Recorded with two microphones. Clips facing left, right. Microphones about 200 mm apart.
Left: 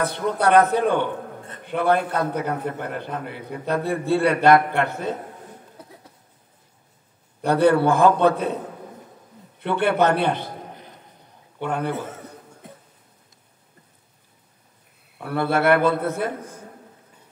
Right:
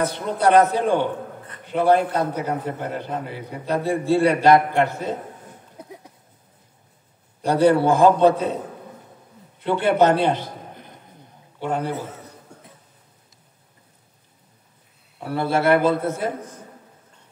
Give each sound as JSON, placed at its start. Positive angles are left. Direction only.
{"t": 0.0, "sound": "a man's voice", "side_deg": 60}
{"t": 7.4, "sound": "a man's voice", "side_deg": 60}
{"t": 9.8, "sound": "a man's voice", "side_deg": 55}
{"t": 11.6, "sound": "a man's voice", "side_deg": 60}
{"t": 15.1, "sound": "a man's voice", "side_deg": 60}